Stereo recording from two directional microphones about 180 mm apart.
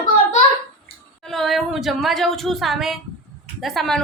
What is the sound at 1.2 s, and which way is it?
A woman's voice, centre (ahead or behind).